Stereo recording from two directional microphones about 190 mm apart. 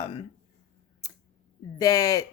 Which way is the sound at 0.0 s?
25° left (ahead or behind).